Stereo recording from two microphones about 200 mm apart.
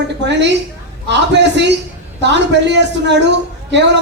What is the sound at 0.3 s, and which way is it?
Speech, 60° right (ahead or behind).